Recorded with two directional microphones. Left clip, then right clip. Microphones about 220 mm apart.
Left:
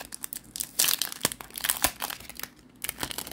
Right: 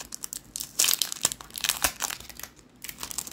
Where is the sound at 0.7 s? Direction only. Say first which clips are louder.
Right 2 dB; 15° left (ahead or behind).